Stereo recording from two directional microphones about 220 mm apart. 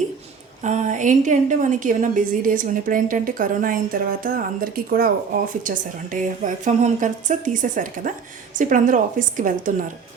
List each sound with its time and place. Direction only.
0.6 s a woman's voice: 30° right (ahead or behind)